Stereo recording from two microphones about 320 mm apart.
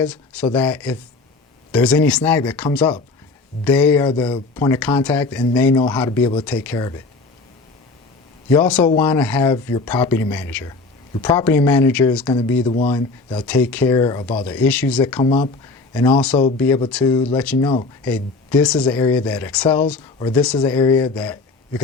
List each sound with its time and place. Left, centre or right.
0.0 s speech: centre
4.0 s speech: centre
8.4 s speech: centre
12.3 s speech: centre
12.9 s speech: centre